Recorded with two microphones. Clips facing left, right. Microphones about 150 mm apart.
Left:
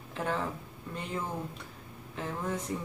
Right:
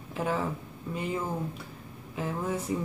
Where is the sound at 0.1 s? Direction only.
5° right (ahead or behind).